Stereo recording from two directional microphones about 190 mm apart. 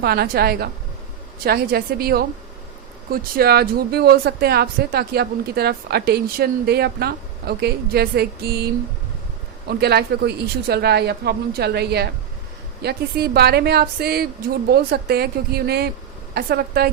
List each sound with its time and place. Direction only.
0.0 s a woman's voice: 55° right (ahead or behind)